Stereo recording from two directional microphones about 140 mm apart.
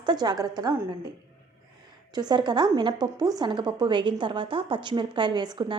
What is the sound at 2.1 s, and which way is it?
Speech, 30° right (ahead or behind).